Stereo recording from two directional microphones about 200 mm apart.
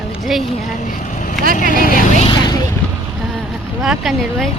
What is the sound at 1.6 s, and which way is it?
Speech, 45° left (ahead or behind).